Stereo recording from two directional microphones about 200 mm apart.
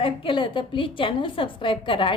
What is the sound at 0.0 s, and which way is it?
A woman's voice, 25° left (ahead or behind).